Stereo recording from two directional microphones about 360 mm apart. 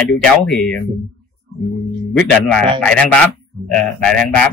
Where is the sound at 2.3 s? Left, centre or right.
Centre.